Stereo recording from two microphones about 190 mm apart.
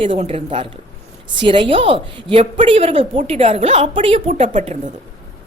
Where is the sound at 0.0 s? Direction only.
30° right (ahead or behind).